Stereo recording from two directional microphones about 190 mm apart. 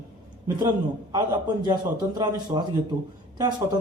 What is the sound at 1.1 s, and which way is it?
A man's voice, 25° right (ahead or behind).